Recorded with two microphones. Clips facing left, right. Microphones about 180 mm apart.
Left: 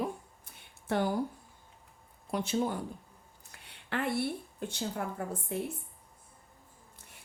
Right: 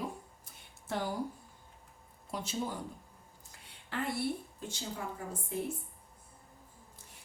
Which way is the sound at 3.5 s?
65° left (ahead or behind).